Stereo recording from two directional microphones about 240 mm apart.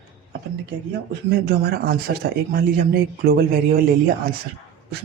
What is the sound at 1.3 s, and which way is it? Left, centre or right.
Speech, right.